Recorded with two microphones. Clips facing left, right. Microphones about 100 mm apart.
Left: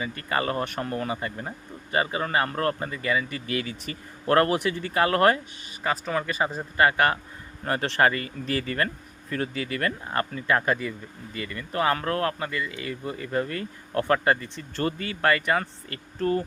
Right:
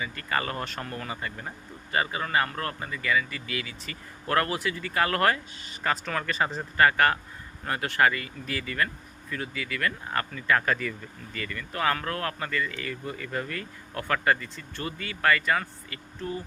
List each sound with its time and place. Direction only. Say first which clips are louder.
0.0 s speech: left 3 dB; 30° left (ahead or behind)
5.8 s speech: left 2 dB; 15° left (ahead or behind)
6.7 s speech: even; 20° left (ahead or behind)
7.6 s speech: left 2 dB; 35° left (ahead or behind)